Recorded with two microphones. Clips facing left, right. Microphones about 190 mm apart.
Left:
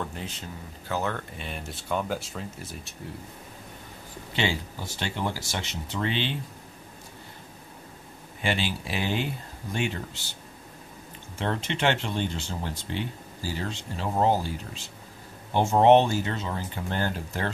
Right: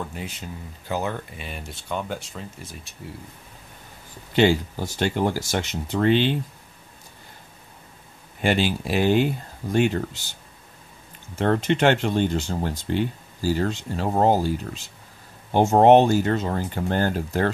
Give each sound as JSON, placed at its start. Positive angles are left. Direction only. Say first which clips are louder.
{"t": 0.0, "sound": "speech", "louder": "right 2 dB", "side_deg": -10}
{"t": 1.5, "sound": "speech", "louder": "left 1 dB", "side_deg": 0}
{"t": 4.4, "sound": "speech", "louder": "right 10 dB", "side_deg": -50}
{"t": 8.4, "sound": "speech", "louder": "right 7 dB", "side_deg": -50}
{"t": 11.3, "sound": "speech", "louder": "right 9 dB", "side_deg": -45}
{"t": 15.5, "sound": "speech", "louder": "right 4 dB", "side_deg": -45}